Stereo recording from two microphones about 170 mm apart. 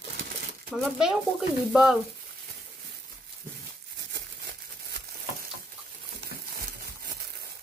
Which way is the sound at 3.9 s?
90° right.